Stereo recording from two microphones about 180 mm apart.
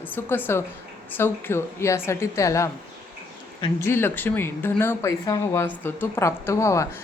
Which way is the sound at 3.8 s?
15° left (ahead or behind).